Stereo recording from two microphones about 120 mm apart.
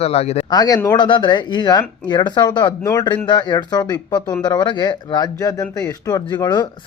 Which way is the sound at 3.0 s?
40° left (ahead or behind).